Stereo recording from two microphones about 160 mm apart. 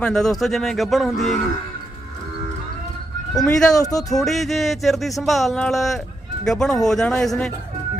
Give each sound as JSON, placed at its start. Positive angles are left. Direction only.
{"t": 0.0, "sound": "speech", "side_deg": 5}
{"t": 3.3, "sound": "speech", "side_deg": 5}